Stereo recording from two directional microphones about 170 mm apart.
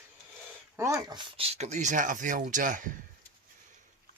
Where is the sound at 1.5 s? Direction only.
40° right (ahead or behind).